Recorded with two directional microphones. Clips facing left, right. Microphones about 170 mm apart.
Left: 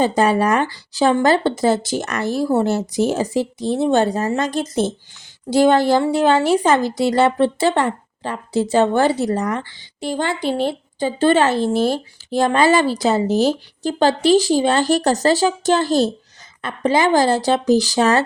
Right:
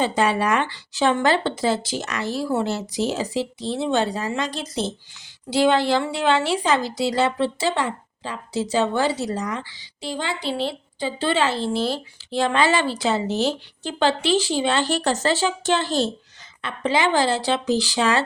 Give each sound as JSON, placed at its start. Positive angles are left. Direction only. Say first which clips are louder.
{"t": 0.0, "sound": "a woman's voice", "louder": "left 5 dB", "side_deg": 40}